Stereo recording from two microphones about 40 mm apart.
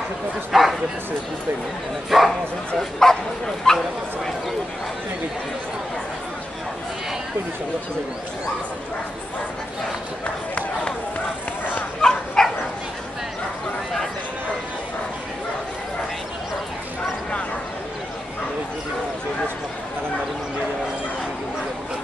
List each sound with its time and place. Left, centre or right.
0.5 s bow-wow: centre
2.0 s speech: centre
2.8 s speech: centre
10.5 s run: left
12.0 s bow-wow: centre